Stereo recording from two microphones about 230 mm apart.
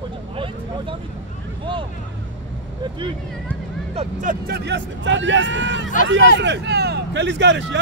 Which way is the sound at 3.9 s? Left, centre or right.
Right.